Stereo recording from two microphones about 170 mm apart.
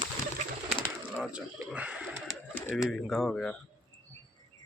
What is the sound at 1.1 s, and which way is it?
Speech, 5° right (ahead or behind).